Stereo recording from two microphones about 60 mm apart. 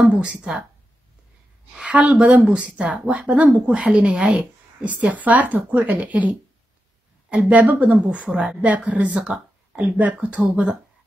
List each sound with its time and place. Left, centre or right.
0.0 s speech: right
1.9 s speech: centre
5.0 s speech: right
8.3 s speech: centre
8.6 s speech: right